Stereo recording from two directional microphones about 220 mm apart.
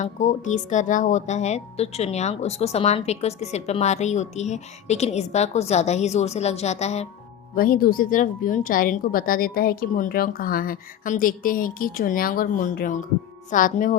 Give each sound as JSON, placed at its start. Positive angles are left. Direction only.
{"t": 0.0, "sound": "speech", "side_deg": 35}
{"t": 7.5, "sound": "a woman's voice", "side_deg": 40}